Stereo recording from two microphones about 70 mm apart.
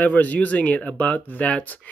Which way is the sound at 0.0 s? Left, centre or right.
Left.